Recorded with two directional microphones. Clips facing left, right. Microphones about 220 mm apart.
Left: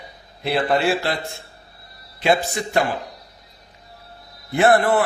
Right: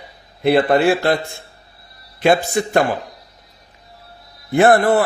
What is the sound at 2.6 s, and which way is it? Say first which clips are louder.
Speech: right 7 dB; 55° right (ahead or behind).